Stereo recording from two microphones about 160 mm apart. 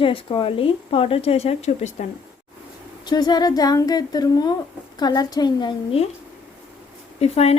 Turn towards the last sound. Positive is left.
turn(degrees=40)  # may be behind; listen again after turning